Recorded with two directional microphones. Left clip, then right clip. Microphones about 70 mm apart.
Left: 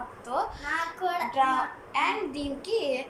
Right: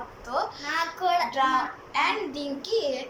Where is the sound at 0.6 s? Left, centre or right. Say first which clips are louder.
Right 3 dB; centre.